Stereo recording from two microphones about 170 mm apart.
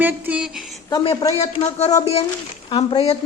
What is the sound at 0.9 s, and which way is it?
Speech, 25° left (ahead or behind).